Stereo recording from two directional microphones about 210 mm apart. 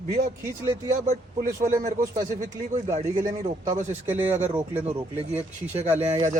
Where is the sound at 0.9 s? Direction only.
35° right (ahead or behind).